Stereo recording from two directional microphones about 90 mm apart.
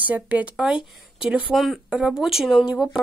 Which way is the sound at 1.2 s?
5° right (ahead or behind).